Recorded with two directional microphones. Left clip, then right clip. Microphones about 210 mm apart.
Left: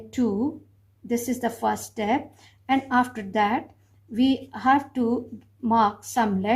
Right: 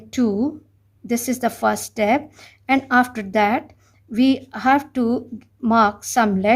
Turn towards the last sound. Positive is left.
turn(degrees=-50)  # may be behind; listen again after turning